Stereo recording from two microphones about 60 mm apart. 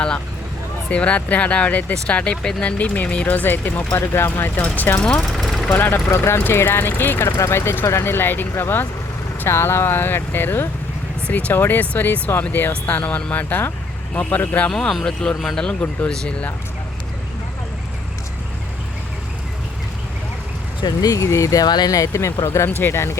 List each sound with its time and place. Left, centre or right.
0.9 s speech: left
4.5 s speech: left
5.4 s vehicle: centre
5.7 s speech: left
7.3 s speech: left
11.3 s speech: left
11.5 s speech: left
14.1 s speech: left
14.7 s speech: centre
21.0 s speech: left